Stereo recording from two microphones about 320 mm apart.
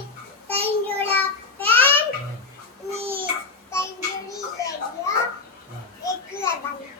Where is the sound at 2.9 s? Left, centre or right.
Centre.